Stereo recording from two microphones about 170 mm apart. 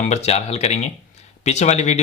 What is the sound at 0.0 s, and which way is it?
Speech, 40° left (ahead or behind).